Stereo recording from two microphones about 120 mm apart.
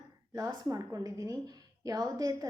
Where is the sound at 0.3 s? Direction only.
30° right (ahead or behind).